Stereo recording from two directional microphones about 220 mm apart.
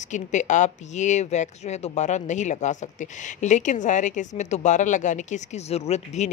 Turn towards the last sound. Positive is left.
turn(degrees=30)  # may be behind; listen again after turning